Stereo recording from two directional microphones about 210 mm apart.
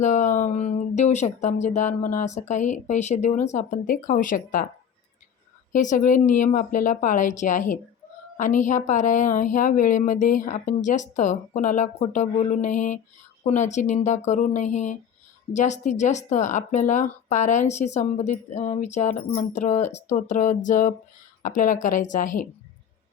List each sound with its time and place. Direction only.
0.0 s a woman's voice: 35° left (ahead or behind)
5.7 s a woman's voice: 40° left (ahead or behind)